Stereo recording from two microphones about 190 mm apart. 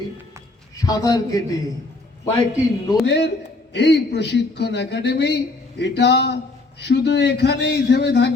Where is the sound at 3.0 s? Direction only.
65° left (ahead or behind).